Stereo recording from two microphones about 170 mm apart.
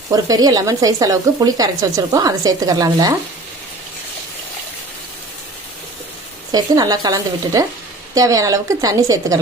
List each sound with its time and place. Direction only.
0.1 s speech: 20° right (ahead or behind)
6.5 s speech: 20° right (ahead or behind)